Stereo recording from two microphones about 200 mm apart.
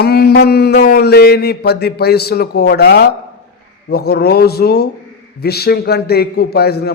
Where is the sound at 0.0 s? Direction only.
50° left (ahead or behind).